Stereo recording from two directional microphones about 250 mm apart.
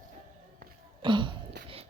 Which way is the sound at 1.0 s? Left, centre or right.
Centre.